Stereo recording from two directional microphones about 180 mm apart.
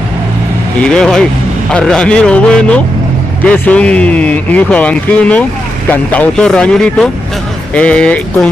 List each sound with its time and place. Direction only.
0.7 s speech: 5° left (ahead or behind)